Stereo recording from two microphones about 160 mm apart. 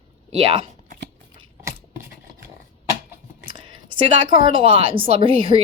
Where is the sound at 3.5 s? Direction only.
30° right (ahead or behind).